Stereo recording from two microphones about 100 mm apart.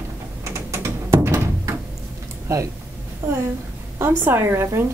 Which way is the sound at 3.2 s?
25° right (ahead or behind).